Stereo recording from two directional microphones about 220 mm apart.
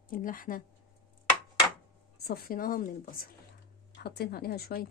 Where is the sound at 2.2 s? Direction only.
45° left (ahead or behind).